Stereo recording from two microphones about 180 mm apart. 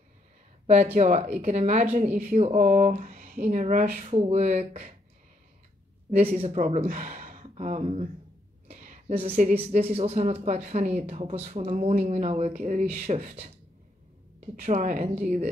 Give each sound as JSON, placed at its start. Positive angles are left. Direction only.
{"t": 0.9, "sound": "speech", "side_deg": -45}
{"t": 6.1, "sound": "speech", "side_deg": -35}
{"t": 8.6, "sound": "a sound", "side_deg": -40}
{"t": 9.1, "sound": "speech", "side_deg": -30}
{"t": 14.6, "sound": "speech", "side_deg": -45}